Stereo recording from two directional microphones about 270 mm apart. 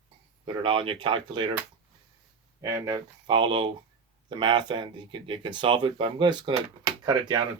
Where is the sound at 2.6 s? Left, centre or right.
Centre.